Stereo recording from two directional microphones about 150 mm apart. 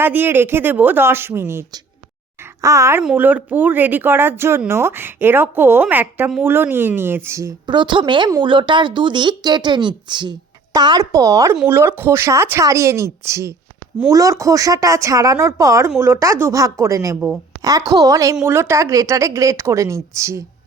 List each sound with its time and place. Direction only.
0.0 s speech: 15° right (ahead or behind)
2.4 s a sound: 20° right (ahead or behind)
3.0 s speech: 10° right (ahead or behind)
17.2 s a woman's voice: 5° right (ahead or behind)
17.6 s speech: 25° right (ahead or behind)